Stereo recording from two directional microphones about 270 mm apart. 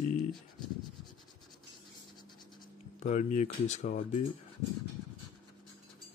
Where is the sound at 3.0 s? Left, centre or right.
Left.